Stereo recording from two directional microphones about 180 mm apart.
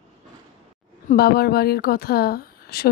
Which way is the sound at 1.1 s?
60° left (ahead or behind).